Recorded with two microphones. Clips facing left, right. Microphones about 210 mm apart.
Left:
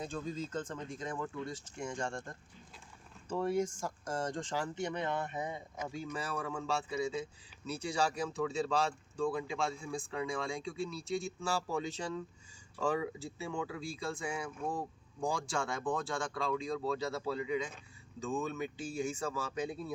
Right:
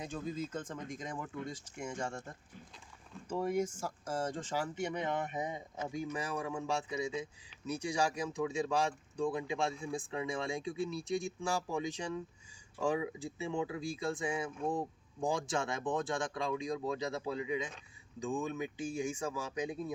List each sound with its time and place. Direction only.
0.0 s speech: 10° right (ahead or behind)
3.3 s speech: 10° right (ahead or behind)